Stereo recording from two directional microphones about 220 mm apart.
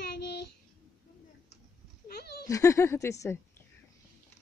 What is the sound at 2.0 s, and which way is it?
Speech, 45° left (ahead or behind).